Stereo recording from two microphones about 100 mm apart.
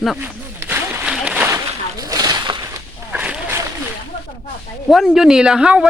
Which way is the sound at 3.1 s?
10° right (ahead or behind).